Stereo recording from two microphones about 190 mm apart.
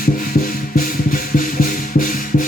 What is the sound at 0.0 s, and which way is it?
Music, 45° left (ahead or behind).